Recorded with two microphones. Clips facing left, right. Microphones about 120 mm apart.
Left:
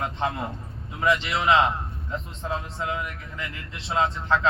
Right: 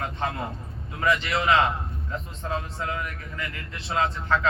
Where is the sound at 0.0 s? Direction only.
25° left (ahead or behind).